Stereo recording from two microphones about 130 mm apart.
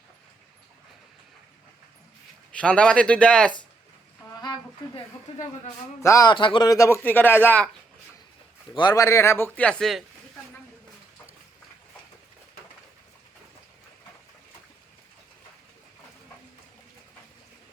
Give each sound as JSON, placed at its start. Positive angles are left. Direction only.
{"t": 2.5, "sound": "speech", "side_deg": 10}
{"t": 5.3, "sound": "a sound", "side_deg": 55}
{"t": 6.0, "sound": "speech", "side_deg": 25}
{"t": 6.3, "sound": "speech", "side_deg": 40}
{"t": 8.7, "sound": "speech", "side_deg": 30}